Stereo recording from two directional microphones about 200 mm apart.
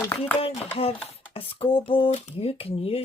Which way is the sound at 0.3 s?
30° left (ahead or behind).